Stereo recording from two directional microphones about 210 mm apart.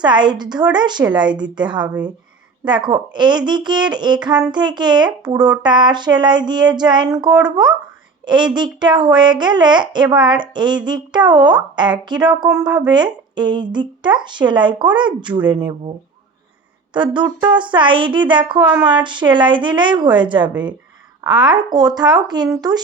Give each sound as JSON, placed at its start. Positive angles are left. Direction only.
{"t": 0.0, "sound": "speech", "side_deg": -20}
{"t": 16.9, "sound": "speech", "side_deg": -20}